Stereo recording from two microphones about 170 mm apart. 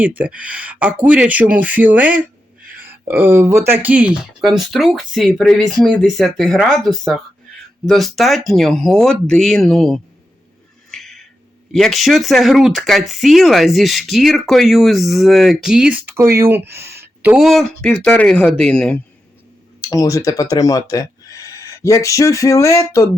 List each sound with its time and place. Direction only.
0.0 s speech: 10° right (ahead or behind)
10.9 s music: centre (ahead or behind)
11.8 s speech: centre (ahead or behind)
16.1 s speech: 15° right (ahead or behind)
16.7 s a sound: 15° right (ahead or behind)
17.3 s speech: centre (ahead or behind)
19.8 s speech: 20° left (ahead or behind)